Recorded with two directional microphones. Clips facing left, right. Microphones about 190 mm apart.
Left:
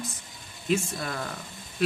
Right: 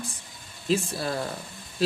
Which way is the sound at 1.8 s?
30° right (ahead or behind).